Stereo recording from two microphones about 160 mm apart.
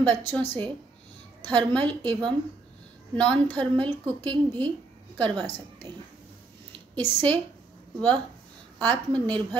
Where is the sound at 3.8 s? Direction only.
10° left (ahead or behind).